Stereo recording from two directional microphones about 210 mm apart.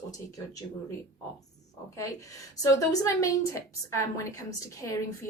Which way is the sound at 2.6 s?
15° left (ahead or behind).